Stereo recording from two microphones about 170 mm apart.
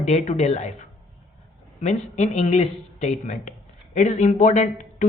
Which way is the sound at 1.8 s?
45° left (ahead or behind).